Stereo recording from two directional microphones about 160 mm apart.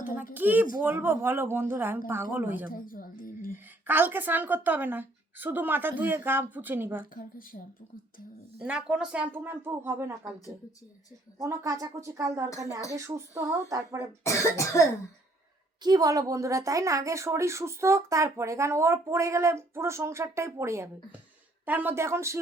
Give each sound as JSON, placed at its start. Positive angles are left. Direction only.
{"t": 0.3, "sound": "speech", "side_deg": -10}
{"t": 2.6, "sound": "speech", "side_deg": 60}
{"t": 3.8, "sound": "speech", "side_deg": -10}
{"t": 7.1, "sound": "speech", "side_deg": 60}
{"t": 8.5, "sound": "speech", "side_deg": -5}
{"t": 11.3, "sound": "speech", "side_deg": -20}
{"t": 14.3, "sound": "cough", "side_deg": 20}
{"t": 15.8, "sound": "speech", "side_deg": -25}